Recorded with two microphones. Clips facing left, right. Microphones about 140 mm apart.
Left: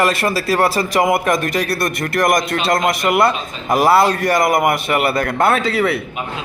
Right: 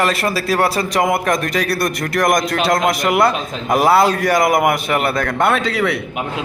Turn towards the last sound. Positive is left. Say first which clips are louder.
# left 1 dB
turn(degrees=0)  # may be behind; listen again after turning